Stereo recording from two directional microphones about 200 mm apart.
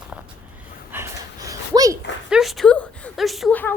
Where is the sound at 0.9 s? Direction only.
15° right (ahead or behind).